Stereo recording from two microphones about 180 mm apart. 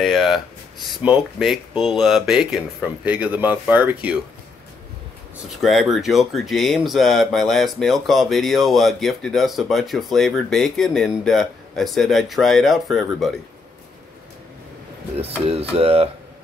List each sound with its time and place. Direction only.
0.0 s speech: centre (ahead or behind)
5.6 s speech: centre (ahead or behind)
15.1 s speech: 35° right (ahead or behind)